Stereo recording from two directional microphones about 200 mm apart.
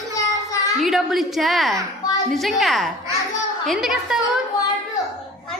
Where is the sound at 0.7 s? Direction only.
Centre (ahead or behind).